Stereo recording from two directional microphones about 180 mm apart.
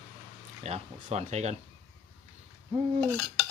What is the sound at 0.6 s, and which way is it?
Speech, 35° right (ahead or behind).